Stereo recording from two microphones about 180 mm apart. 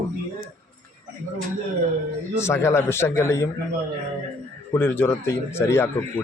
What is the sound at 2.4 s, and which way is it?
Speech, 15° left (ahead or behind).